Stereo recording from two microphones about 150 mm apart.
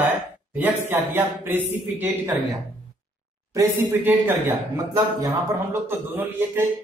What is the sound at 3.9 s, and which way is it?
Speech, 10° right (ahead or behind).